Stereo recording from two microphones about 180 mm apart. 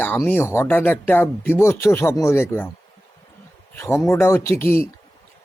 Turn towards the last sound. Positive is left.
turn(degrees=15)  # may be behind; listen again after turning